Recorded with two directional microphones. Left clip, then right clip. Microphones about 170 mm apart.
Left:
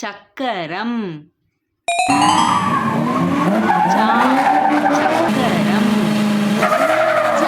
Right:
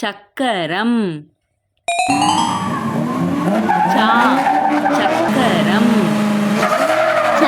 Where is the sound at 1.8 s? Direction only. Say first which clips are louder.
Left 1 dB; centre (ahead or behind).